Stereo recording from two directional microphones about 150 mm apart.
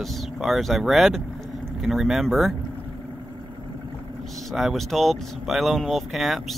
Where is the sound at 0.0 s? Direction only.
Centre (ahead or behind).